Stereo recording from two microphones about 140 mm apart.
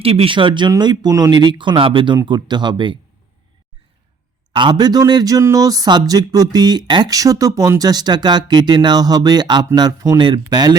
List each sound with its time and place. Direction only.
0.0 s speech: 45° right (ahead or behind)
4.5 s speech: 30° right (ahead or behind)